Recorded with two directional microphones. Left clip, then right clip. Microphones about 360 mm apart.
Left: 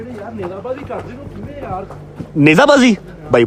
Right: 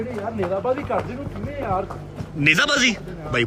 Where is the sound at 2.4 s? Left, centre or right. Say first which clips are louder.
Left 8 dB; centre.